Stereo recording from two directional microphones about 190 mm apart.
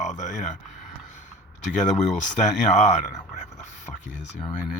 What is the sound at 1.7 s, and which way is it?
Speech, 40° left (ahead or behind).